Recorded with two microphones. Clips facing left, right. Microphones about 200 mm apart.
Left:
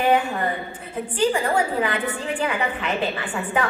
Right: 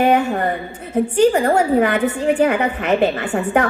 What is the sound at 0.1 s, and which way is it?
A woman's voice, 45° right (ahead or behind).